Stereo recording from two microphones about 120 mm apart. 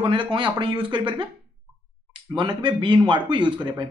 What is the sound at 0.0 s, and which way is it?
Speech, 40° right (ahead or behind).